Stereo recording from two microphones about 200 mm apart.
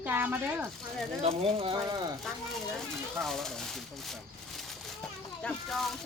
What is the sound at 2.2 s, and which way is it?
Speech, centre (ahead or behind).